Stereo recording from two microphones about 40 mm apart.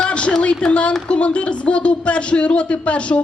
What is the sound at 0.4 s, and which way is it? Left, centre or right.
Speech, left.